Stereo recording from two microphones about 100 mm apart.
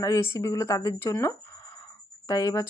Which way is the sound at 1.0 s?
20° left (ahead or behind).